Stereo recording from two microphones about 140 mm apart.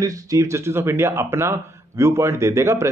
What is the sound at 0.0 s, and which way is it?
Speech, 25° right (ahead or behind).